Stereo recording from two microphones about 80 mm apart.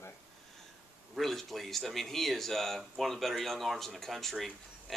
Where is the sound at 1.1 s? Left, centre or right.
Centre.